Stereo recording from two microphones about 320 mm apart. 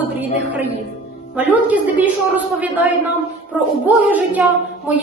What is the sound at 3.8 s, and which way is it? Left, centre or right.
A woman's voice, centre.